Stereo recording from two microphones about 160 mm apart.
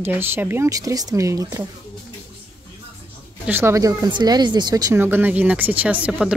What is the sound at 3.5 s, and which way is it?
Speech, 15° right (ahead or behind).